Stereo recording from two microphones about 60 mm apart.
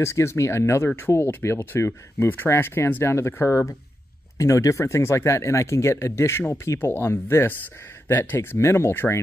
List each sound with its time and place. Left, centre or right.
0.0 s speech: left
0.8 s speech: left
4.4 s speech: left
6.8 s speech: left
8.4 s speech: left